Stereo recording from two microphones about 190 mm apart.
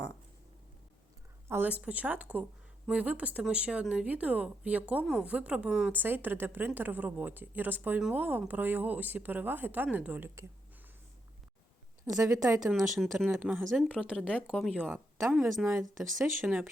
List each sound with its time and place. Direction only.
1.5 s speech: 10° right (ahead or behind)
12.0 s a woman's voice: 15° right (ahead or behind)